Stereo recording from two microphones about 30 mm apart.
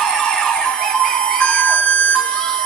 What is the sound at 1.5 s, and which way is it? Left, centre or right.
Siren, left.